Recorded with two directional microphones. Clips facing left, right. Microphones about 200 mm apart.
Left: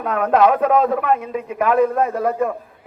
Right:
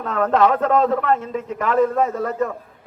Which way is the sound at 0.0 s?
10° left (ahead or behind).